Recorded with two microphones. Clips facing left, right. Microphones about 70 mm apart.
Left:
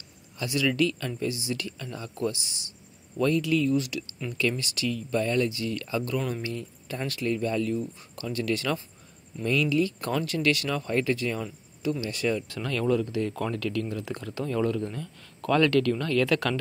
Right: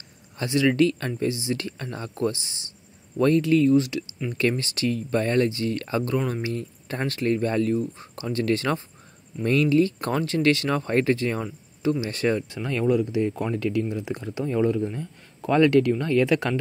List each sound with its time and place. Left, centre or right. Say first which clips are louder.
0.4 s speech: right 5 dB; right
6.1 s speech: right 4 dB; right
6.5 s speech: right 4 dB; right
12.4 s speech: right 3 dB; right